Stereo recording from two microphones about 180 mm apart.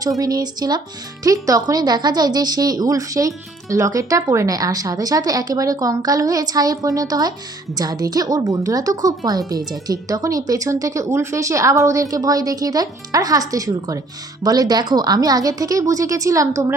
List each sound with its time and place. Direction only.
0.2 s a woman's voice: 20° right (ahead or behind)